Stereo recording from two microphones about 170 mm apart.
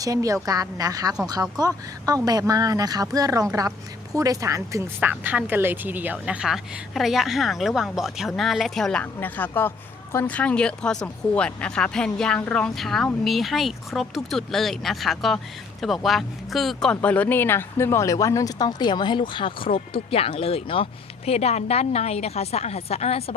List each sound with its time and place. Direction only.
0.0 s a woman's voice: 20° right (ahead or behind); by 23.3 s 40° left (ahead or behind)